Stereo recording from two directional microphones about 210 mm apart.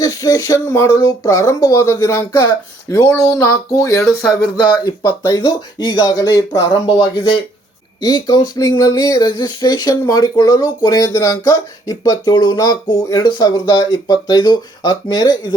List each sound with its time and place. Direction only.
0.0 s speech: 15° left (ahead or behind)